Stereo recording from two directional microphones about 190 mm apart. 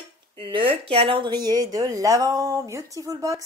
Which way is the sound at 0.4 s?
25° right (ahead or behind).